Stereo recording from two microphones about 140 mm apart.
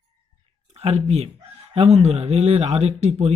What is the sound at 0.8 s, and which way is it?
Speech, 50° right (ahead or behind).